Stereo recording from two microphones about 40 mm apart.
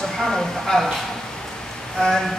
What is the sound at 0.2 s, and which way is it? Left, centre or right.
Speech, centre.